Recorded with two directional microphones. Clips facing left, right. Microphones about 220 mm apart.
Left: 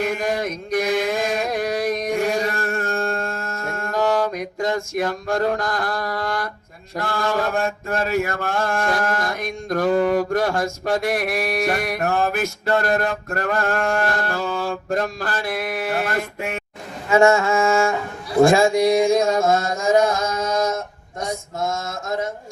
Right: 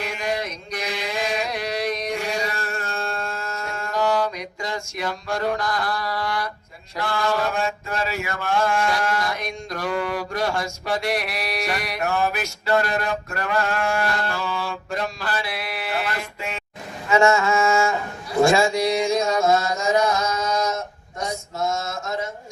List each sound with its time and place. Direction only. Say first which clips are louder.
0.0 s mantra: left 5 dB; 50° left (ahead or behind)
18.5 s mantra: left 4 dB; 50° left (ahead or behind)